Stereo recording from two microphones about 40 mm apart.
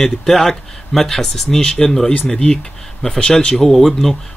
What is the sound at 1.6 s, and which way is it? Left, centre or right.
Speech, centre.